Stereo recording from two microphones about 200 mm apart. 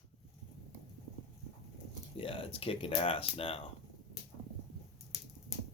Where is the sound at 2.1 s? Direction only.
30° left (ahead or behind).